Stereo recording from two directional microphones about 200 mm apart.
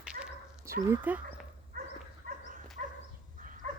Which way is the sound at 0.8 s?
10° right (ahead or behind).